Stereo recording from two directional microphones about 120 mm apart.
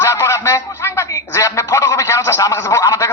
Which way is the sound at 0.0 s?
20° left (ahead or behind).